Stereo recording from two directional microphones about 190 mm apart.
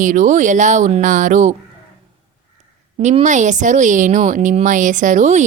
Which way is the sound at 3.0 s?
40° right (ahead or behind).